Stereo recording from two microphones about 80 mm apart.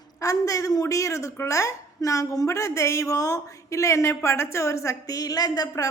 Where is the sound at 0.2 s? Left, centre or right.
Left.